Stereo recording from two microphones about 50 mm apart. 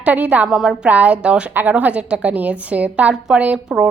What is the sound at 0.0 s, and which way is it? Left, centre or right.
Speech, right.